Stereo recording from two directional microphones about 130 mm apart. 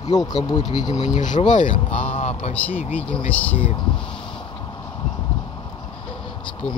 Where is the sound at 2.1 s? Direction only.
55° left (ahead or behind).